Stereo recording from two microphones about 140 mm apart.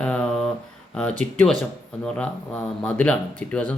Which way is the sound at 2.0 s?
10° left (ahead or behind).